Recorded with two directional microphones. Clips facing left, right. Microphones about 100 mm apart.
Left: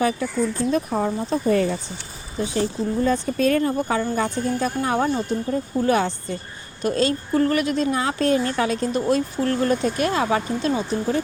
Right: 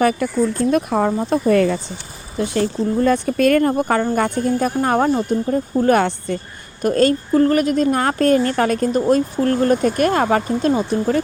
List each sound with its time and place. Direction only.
0.0 s speech: 65° right (ahead or behind); by 1.8 s 80° right
2.4 s speech: 65° right (ahead or behind); by 6.0 s 45° right (ahead or behind)
6.0 s speech: 60° right (ahead or behind)
6.8 s a woman's voice: 50° right (ahead or behind)
7.3 s a woman's voice: 40° right (ahead or behind)